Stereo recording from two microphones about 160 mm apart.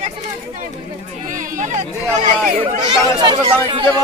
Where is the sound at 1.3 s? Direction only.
50° right (ahead or behind).